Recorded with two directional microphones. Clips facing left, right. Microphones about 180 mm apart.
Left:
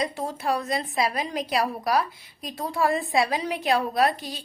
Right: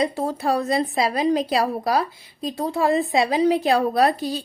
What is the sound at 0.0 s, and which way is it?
A woman's voice, 35° right (ahead or behind).